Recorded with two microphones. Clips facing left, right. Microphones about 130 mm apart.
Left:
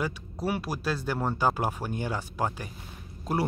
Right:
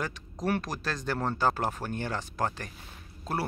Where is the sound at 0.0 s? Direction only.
10° left (ahead or behind).